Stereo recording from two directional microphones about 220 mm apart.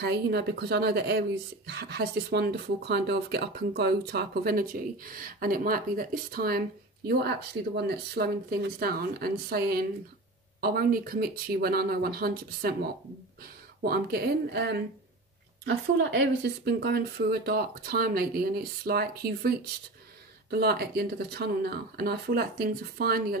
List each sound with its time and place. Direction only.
0.0 s speech: 50° right (ahead or behind)
13.8 s speech: 45° right (ahead or behind)